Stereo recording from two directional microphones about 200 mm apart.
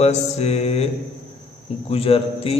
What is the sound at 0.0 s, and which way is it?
Speech, 35° left (ahead or behind).